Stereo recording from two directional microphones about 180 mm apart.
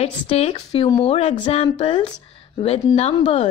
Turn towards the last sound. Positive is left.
turn(degrees=35)  # may be behind; listen again after turning